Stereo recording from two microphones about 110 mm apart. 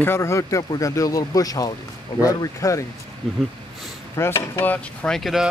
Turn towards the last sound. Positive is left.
turn(degrees=0)  # may be behind; listen again after turning